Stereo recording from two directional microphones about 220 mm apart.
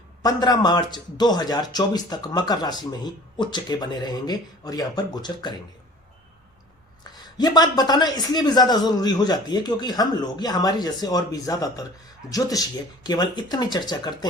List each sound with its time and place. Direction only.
0.2 s a man's voice: 15° left (ahead or behind)
7.0 s a man's voice: 20° left (ahead or behind)